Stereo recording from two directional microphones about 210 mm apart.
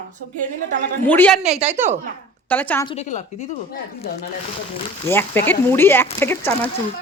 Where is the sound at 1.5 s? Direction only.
30° right (ahead or behind).